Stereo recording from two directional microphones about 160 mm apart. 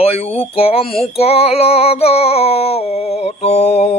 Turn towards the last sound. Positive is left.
turn(degrees=40)  # may be behind; listen again after turning